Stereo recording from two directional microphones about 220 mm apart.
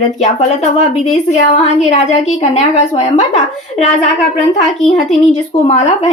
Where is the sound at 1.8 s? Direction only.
30° left (ahead or behind).